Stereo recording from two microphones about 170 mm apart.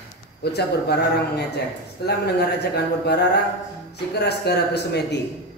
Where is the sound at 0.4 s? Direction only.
75° left (ahead or behind).